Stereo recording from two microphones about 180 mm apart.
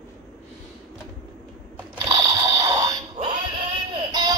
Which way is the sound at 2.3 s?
20° right (ahead or behind).